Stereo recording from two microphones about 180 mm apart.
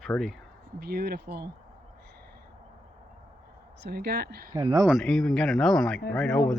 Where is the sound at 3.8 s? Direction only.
60° right (ahead or behind).